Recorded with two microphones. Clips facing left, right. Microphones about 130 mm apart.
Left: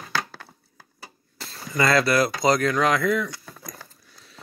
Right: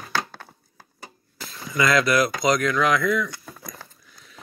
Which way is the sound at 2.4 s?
35° left (ahead or behind).